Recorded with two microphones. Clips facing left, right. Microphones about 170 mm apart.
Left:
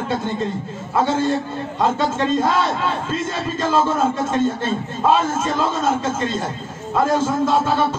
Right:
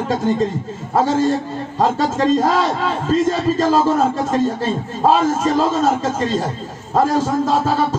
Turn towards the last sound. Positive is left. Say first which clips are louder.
# right 1 dB
turn(degrees=-35)  # may be behind; listen again after turning